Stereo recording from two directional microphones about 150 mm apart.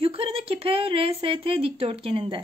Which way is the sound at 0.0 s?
40° right (ahead or behind).